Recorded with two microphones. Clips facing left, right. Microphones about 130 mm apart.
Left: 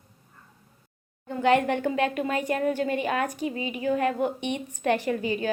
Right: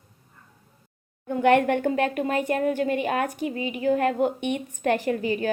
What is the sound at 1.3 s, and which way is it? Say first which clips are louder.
A woman's voice: right 3 dB; 55° right (ahead or behind).